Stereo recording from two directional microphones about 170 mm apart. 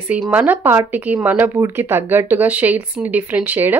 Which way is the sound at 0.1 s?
10° right (ahead or behind).